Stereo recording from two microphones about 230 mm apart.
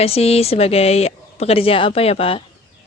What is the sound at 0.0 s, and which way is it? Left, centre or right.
A woman's voice, left.